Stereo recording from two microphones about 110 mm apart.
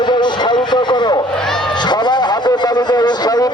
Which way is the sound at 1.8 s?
40° left (ahead or behind).